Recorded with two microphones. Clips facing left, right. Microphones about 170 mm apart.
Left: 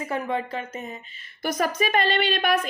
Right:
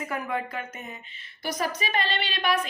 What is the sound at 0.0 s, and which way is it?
A woman's voice, 30° left (ahead or behind).